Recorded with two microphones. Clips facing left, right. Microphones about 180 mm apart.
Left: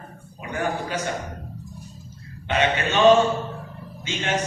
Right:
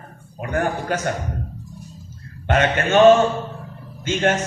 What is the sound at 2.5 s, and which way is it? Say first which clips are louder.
Speech: right 4 dB; 50° right (ahead or behind).